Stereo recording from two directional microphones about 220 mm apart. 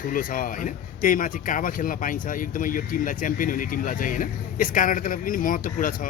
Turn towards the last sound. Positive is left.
turn(degrees=40)  # may be behind; listen again after turning